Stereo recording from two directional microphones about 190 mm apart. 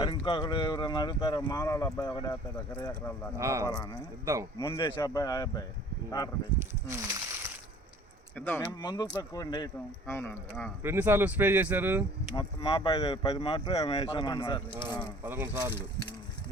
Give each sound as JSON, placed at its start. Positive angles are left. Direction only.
{"t": 0.0, "sound": "speech", "side_deg": 25}
{"t": 3.3, "sound": "speech", "side_deg": -15}
{"t": 4.9, "sound": "speech", "side_deg": 20}
{"t": 6.8, "sound": "a sound", "side_deg": -15}
{"t": 8.4, "sound": "speech", "side_deg": 10}
{"t": 8.8, "sound": "speech", "side_deg": 20}
{"t": 10.8, "sound": "speech", "side_deg": -10}
{"t": 12.3, "sound": "speech", "side_deg": 20}
{"t": 14.7, "sound": "speech", "side_deg": -15}